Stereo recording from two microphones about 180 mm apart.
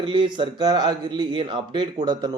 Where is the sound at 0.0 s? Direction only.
25° right (ahead or behind).